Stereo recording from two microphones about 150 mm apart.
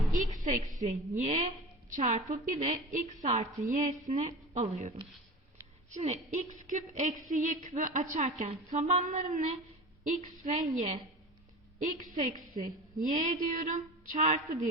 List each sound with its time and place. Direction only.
0.1 s a woman's voice: 60° right (ahead or behind)
5.9 s a woman's voice: 45° right (ahead or behind)